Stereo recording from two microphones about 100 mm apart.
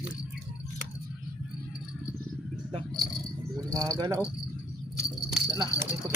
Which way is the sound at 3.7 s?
40° right (ahead or behind).